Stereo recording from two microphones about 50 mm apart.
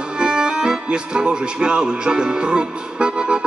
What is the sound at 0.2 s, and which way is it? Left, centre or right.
Speech, centre.